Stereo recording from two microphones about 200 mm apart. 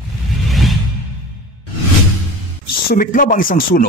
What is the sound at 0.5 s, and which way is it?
Music, centre (ahead or behind).